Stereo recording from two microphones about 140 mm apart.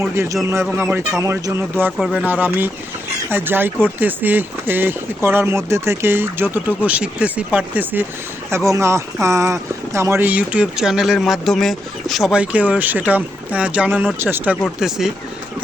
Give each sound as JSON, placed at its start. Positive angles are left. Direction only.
{"t": 0.0, "sound": "speech", "side_deg": -20}
{"t": 2.0, "sound": "speech", "side_deg": 0}
{"t": 2.2, "sound": "speech", "side_deg": -10}
{"t": 14.6, "sound": "speech", "side_deg": -5}